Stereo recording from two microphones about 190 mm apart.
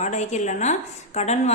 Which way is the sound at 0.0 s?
40° left (ahead or behind).